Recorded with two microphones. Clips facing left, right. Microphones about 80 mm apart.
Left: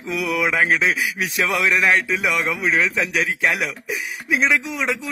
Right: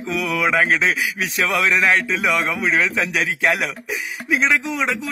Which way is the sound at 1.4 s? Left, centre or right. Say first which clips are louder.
Right 1 dB; centre.